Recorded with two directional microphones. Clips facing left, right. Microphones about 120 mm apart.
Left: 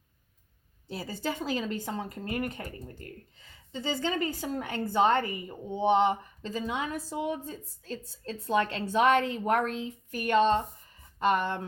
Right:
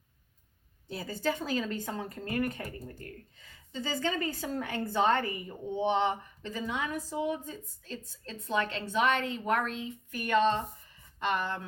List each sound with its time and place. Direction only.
0.9 s a woman's voice: 25° left (ahead or behind)
3.7 s a woman's voice: 20° left (ahead or behind)
7.3 s a woman's voice: 35° left (ahead or behind)